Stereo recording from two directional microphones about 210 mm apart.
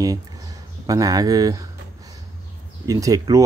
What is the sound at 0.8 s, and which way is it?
Speech, 15° right (ahead or behind).